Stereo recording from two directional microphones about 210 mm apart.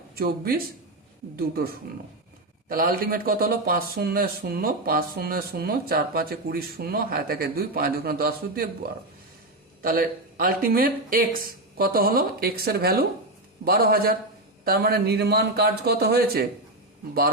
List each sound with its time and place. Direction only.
0.2 s a man's voice: 45° right (ahead or behind)
9.8 s a man's voice: 45° right (ahead or behind)